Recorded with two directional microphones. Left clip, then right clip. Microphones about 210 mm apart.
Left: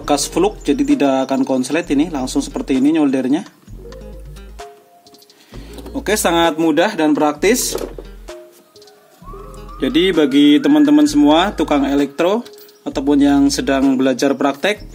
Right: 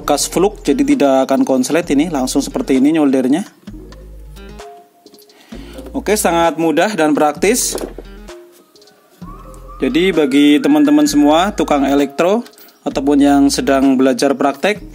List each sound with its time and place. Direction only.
0.0 s speech: 25° right (ahead or behind)
4.4 s music: centre (ahead or behind)
5.6 s a sound: 20° right (ahead or behind)
6.7 s speech: 30° right (ahead or behind)
9.8 s speech: 20° right (ahead or behind)